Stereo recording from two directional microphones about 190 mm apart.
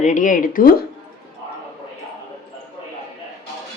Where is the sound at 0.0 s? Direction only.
45° left (ahead or behind).